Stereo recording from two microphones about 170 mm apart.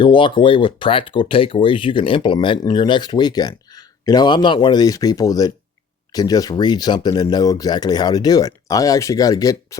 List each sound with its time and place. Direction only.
0.0 s speech: 30° left (ahead or behind)